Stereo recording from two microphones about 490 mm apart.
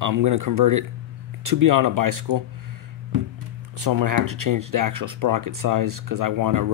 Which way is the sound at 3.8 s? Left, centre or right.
Right.